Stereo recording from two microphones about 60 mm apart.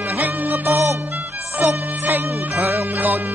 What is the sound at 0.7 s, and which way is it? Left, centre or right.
Music, right.